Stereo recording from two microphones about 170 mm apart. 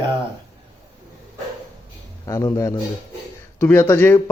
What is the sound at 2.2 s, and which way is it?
A man's voice, 20° left (ahead or behind).